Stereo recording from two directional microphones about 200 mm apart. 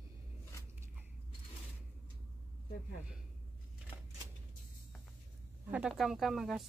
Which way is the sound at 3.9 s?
25° left (ahead or behind).